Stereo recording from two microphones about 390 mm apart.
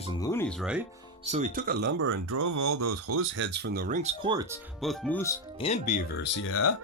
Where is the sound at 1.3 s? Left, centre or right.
Centre.